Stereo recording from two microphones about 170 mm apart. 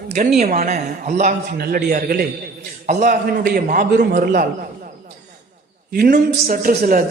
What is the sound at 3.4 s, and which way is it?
A man's voice, 60° right (ahead or behind).